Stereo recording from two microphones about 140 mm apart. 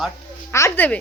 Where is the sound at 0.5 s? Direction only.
20° left (ahead or behind).